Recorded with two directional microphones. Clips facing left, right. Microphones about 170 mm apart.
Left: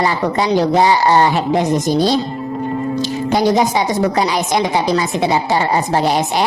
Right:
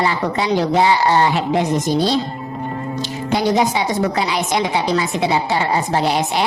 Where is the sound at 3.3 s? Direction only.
40° left (ahead or behind).